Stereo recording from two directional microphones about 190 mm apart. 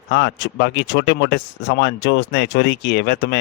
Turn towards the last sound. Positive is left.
turn(degrees=60)  # may be behind; listen again after turning